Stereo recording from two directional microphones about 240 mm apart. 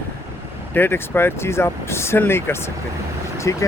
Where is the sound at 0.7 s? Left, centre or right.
Centre.